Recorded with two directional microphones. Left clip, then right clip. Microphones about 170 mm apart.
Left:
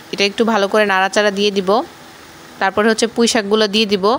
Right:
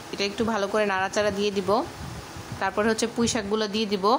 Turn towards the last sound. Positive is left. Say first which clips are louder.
# left 9 dB
turn(degrees=35)  # may be behind; listen again after turning